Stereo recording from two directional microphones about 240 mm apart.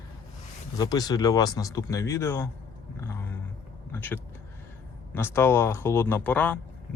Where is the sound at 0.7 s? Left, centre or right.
Centre.